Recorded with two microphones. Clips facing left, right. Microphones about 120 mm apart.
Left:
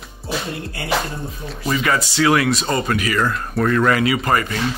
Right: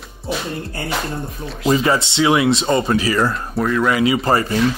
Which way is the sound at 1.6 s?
25° right (ahead or behind).